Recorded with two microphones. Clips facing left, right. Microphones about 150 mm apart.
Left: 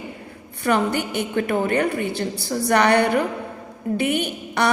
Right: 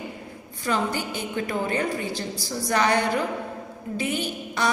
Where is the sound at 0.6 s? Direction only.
65° left (ahead or behind).